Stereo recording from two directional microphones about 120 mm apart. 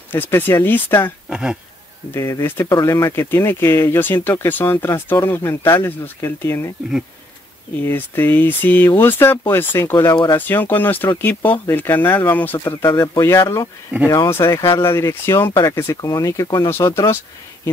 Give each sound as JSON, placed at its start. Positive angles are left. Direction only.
{"t": 0.1, "sound": "speech", "side_deg": 20}
{"t": 1.3, "sound": "speech", "side_deg": -5}
{"t": 2.1, "sound": "speech", "side_deg": 25}
{"t": 7.8, "sound": "speech", "side_deg": 15}
{"t": 12.9, "sound": "speech", "side_deg": 30}